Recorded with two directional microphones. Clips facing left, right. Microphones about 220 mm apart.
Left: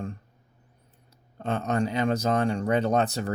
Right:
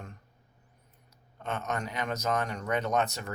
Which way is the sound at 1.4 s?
30° left (ahead or behind).